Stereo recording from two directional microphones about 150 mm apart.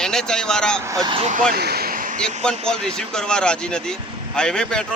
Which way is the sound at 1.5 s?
90° right.